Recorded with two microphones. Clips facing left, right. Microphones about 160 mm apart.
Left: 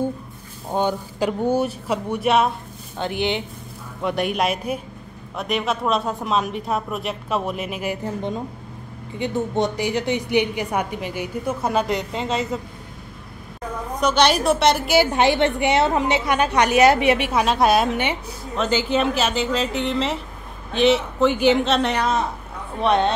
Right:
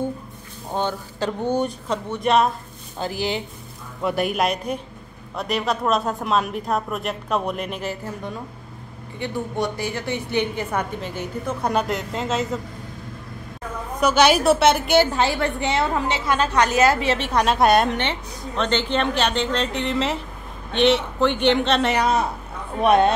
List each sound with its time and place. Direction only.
0.7 s a woman's voice: 10° left (ahead or behind)
7.9 s a woman's voice: 20° left (ahead or behind); by 12.4 s centre (ahead or behind)
13.9 s speech: 5° right (ahead or behind)
15.1 s a woman's voice: 20° left (ahead or behind); by 23.1 s 10° right (ahead or behind)